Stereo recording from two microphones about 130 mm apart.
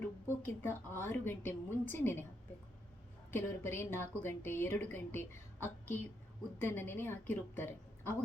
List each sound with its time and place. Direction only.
0.4 s a woman's voice: 20° left (ahead or behind)
3.3 s a woman's voice: 15° left (ahead or behind)